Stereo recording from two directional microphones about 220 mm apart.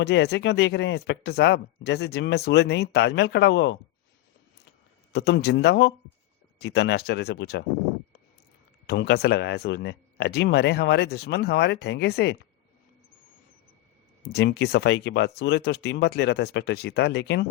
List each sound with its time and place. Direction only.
0.0 s speech: 50° left (ahead or behind)
5.1 s speech: 50° left (ahead or behind)
8.9 s speech: 50° left (ahead or behind)
14.3 s speech: 50° left (ahead or behind)